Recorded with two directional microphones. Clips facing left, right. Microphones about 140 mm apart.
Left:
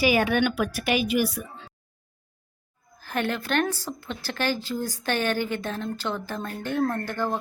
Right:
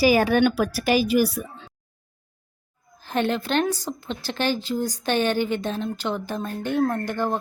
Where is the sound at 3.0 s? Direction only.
20° right (ahead or behind).